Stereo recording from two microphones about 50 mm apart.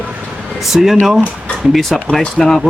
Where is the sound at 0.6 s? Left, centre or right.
Centre.